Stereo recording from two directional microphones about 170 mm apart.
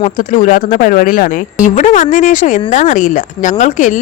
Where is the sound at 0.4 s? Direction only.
50° left (ahead or behind).